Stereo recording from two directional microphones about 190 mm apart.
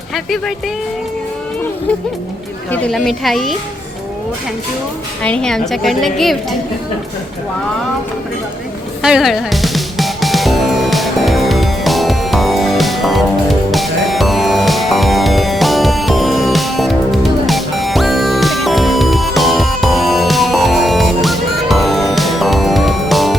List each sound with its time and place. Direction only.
0.1 s a woman's voice: centre (ahead or behind)
2.7 s a woman's voice: 5° left (ahead or behind)
5.2 s a woman's voice: 5° left (ahead or behind)
9.0 s music: 5° right (ahead or behind)